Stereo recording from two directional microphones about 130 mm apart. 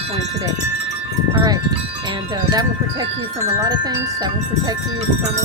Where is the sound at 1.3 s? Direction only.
30° right (ahead or behind).